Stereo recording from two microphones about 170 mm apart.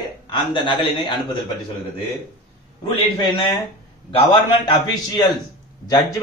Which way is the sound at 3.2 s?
30° left (ahead or behind).